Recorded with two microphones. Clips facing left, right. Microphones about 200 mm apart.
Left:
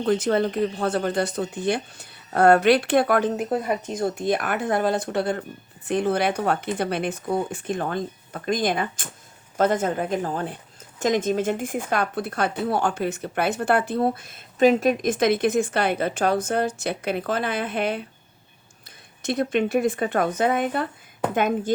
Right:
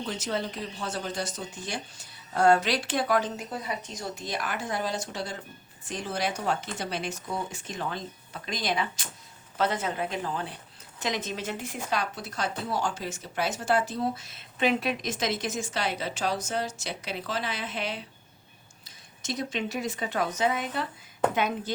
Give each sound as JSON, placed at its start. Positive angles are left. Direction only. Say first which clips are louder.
{"t": 0.0, "sound": "a woman's voice", "louder": "left 10 dB", "side_deg": 55}